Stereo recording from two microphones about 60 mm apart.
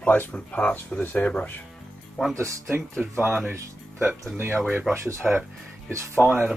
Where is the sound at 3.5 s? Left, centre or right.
Right.